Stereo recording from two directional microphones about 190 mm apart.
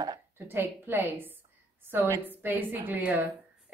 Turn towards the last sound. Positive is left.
turn(degrees=-10)  # may be behind; listen again after turning